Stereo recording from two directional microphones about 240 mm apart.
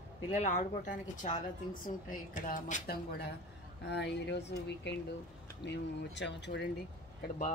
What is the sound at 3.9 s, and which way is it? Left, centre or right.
Speech, left.